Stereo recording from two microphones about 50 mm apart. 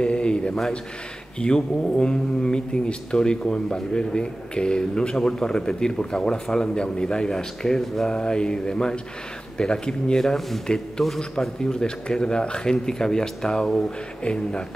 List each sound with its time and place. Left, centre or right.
0.0 s speech: centre